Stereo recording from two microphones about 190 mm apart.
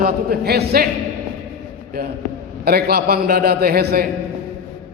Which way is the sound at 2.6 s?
55° right (ahead or behind).